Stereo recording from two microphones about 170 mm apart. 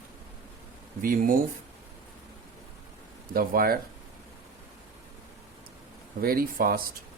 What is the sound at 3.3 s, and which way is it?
Speech, 60° right (ahead or behind).